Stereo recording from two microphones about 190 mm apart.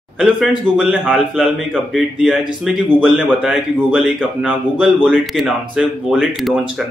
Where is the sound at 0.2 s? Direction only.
5° right (ahead or behind).